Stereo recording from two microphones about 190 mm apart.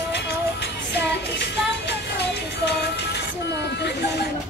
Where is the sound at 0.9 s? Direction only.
65° left (ahead or behind).